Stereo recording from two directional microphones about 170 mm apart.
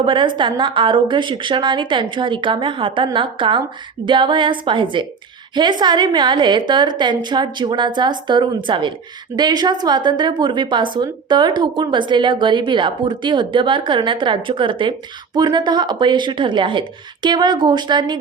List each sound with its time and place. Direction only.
0.0 s a woman's voice: 30° right (ahead or behind)